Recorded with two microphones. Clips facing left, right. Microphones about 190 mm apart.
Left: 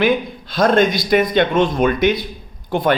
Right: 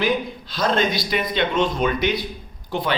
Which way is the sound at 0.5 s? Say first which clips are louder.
Left 7 dB; 50° left (ahead or behind).